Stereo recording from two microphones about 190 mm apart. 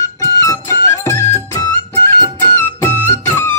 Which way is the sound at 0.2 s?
15° left (ahead or behind).